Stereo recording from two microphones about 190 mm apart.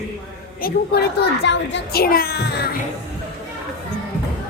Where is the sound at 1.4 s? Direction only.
60° left (ahead or behind).